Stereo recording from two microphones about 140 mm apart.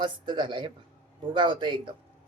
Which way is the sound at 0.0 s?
35° right (ahead or behind).